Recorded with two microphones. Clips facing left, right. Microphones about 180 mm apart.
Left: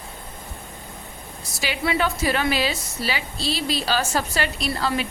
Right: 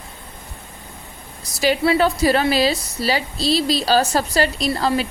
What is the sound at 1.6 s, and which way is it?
A woman's voice, 35° right (ahead or behind).